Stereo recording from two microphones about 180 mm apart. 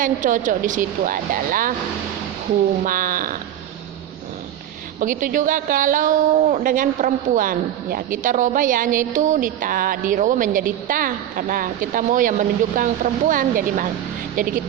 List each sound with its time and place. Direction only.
0.0 s a woman's voice: 45° right (ahead or behind)
2.8 s a woman's voice: 50° right (ahead or behind)
4.9 s a woman's voice: 50° right (ahead or behind)